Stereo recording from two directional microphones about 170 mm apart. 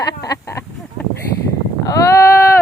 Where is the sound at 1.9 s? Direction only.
20° left (ahead or behind).